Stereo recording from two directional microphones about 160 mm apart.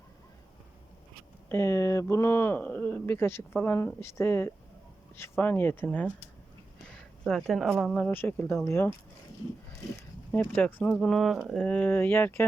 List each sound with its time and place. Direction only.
1.5 s speech: 15° left (ahead or behind)
10.3 s speech: 10° left (ahead or behind)